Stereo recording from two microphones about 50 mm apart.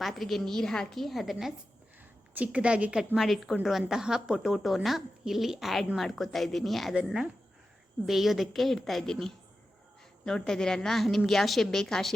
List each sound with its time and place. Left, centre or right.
0.0 s a woman's voice: centre
2.3 s a woman's voice: right
3.2 s a woman's voice: centre
8.0 s a woman's voice: centre